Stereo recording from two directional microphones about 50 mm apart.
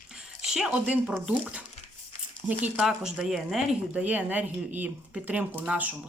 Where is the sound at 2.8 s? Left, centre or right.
Centre.